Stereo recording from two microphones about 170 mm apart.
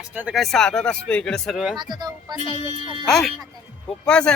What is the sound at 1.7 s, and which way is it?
Speech, 25° right (ahead or behind).